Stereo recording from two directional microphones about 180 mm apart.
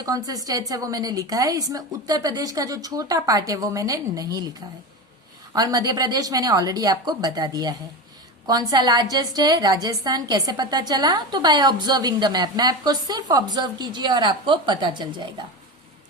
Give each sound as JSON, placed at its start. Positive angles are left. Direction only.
{"t": 0.0, "sound": "a woman's voice", "side_deg": -20}
{"t": 5.5, "sound": "a woman's voice", "side_deg": -20}